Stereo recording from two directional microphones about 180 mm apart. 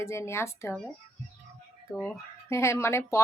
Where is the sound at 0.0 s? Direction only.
15° left (ahead or behind).